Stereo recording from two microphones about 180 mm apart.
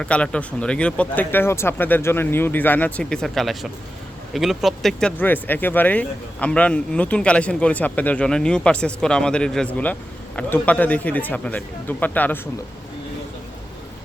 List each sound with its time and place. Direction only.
0.0 s speech: 5° left (ahead or behind)